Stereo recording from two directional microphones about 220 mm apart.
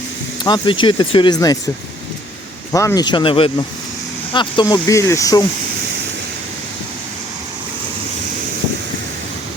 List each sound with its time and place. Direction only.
0.4 s speech: 20° left (ahead or behind)
2.7 s speech: 15° left (ahead or behind)